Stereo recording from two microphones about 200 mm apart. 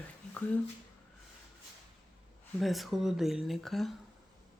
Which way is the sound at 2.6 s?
Centre (ahead or behind).